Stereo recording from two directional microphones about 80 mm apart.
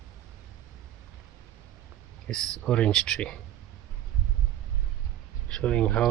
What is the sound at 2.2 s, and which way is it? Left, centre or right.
Speech, centre.